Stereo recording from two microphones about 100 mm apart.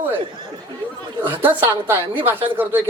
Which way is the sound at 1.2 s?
20° right (ahead or behind).